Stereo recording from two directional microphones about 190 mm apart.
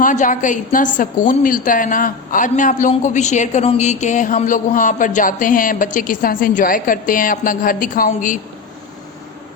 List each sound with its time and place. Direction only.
0.0 s a woman's voice: 45° left (ahead or behind)